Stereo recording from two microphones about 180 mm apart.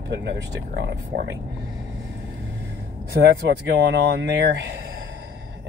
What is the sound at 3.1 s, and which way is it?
Speech, 65° right (ahead or behind).